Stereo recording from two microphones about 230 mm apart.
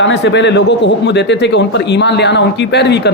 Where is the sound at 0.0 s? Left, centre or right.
Left.